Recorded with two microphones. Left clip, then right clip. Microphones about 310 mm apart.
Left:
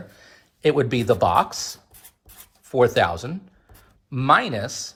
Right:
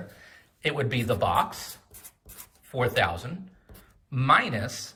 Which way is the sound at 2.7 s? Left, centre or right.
Centre.